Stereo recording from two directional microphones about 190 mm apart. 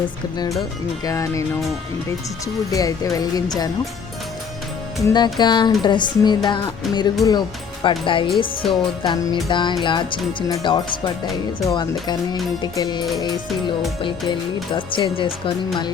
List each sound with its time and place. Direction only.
1.0 s speech: 15° left (ahead or behind)
2.7 s speech: 20° left (ahead or behind)
5.0 s speech: 20° left (ahead or behind)